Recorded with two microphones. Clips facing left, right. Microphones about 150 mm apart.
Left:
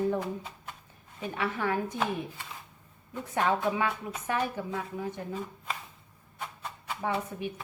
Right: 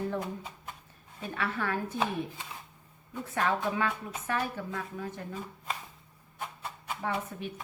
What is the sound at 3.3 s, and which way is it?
A woman's voice, 20° left (ahead or behind).